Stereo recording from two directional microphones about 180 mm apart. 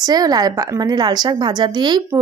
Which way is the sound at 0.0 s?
20° right (ahead or behind).